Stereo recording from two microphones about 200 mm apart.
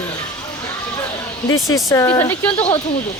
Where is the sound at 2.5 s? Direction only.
30° left (ahead or behind).